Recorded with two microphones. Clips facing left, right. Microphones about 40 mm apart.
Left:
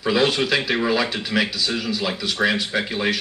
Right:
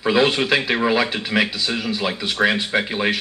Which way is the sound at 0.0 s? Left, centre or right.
Right.